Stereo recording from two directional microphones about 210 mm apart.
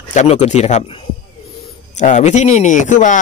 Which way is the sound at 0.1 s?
35° left (ahead or behind).